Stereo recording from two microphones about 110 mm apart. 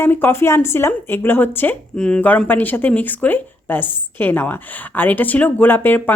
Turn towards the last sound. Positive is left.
turn(degrees=20)  # may be behind; listen again after turning